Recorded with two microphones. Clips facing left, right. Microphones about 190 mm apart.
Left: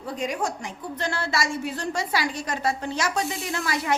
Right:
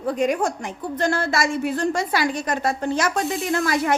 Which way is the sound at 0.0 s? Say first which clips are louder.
Right 7 dB; 55° right (ahead or behind).